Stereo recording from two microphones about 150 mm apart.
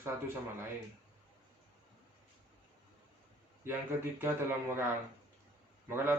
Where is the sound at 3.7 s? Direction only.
15° right (ahead or behind).